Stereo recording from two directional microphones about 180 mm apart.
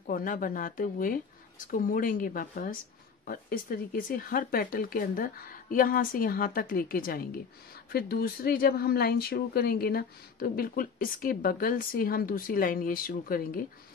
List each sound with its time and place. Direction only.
0.0 s speech: 50° left (ahead or behind)